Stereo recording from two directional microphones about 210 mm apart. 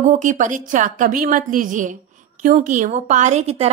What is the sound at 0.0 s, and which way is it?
A woman's voice, 35° right (ahead or behind).